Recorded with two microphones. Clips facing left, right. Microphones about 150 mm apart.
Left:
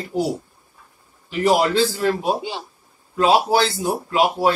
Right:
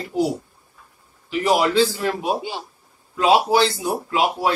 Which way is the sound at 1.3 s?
40° left (ahead or behind).